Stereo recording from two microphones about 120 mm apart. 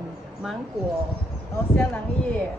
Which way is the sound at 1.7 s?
15° left (ahead or behind).